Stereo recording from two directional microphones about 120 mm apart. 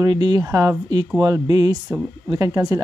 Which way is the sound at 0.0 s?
35° right (ahead or behind).